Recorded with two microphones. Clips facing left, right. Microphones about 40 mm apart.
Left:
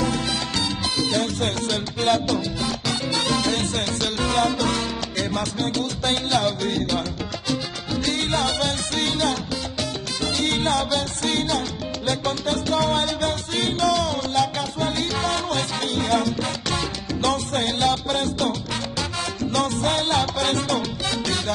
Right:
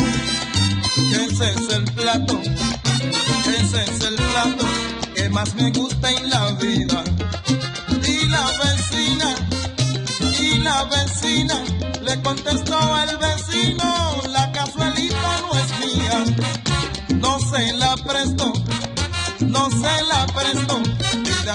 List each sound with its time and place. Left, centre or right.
0.0 s salsa music: right
12.1 s music: right
13.7 s salsa music: right
16.3 s salsa music: right
19.5 s salsa music: right